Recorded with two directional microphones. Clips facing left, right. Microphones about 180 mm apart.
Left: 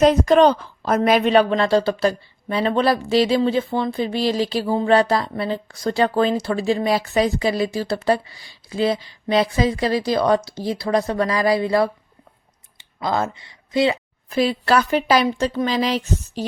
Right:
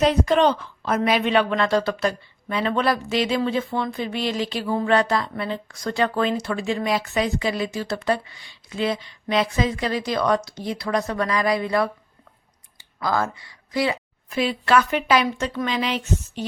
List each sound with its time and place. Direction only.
0.0 s a woman's voice: 45° left (ahead or behind)
13.0 s speech: 25° left (ahead or behind)
14.3 s a woman's voice: 35° left (ahead or behind)